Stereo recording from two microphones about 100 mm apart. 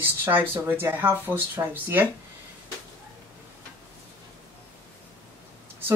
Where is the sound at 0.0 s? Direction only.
20° right (ahead or behind).